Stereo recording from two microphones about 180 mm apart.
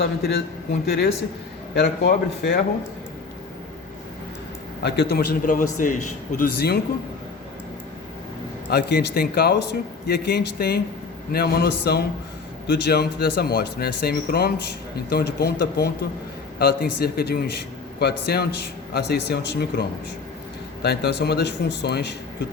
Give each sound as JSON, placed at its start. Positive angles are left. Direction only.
{"t": 0.0, "sound": "speech", "side_deg": 65}
{"t": 4.8, "sound": "a man's voice", "side_deg": 70}
{"t": 8.7, "sound": "speech", "side_deg": 65}
{"t": 20.8, "sound": "speech", "side_deg": 65}